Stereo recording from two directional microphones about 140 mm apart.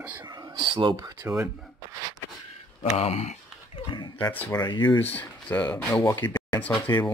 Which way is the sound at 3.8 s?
35° left (ahead or behind).